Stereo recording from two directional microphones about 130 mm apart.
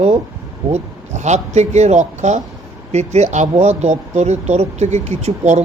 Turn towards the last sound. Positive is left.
turn(degrees=-60)  # may be behind; listen again after turning